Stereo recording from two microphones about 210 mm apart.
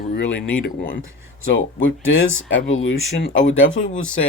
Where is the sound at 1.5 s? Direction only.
65° left (ahead or behind).